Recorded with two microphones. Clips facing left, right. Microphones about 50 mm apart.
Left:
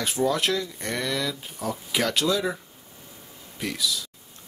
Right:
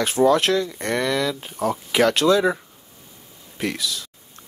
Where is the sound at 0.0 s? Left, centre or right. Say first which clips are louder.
Right 7 dB; right.